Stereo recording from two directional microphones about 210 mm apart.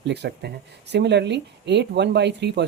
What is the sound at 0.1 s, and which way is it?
Speech, 55° right (ahead or behind).